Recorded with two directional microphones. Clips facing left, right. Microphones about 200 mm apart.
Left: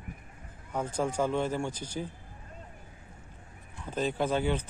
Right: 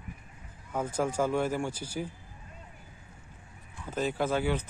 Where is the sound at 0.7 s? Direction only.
5° right (ahead or behind).